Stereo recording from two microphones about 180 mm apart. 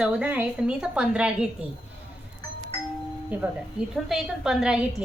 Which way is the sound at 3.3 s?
10° right (ahead or behind).